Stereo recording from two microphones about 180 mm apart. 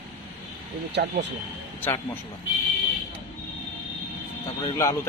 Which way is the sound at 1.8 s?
10° left (ahead or behind).